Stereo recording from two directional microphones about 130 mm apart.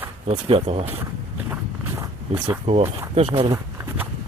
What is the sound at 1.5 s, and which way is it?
Walk, 20° right (ahead or behind).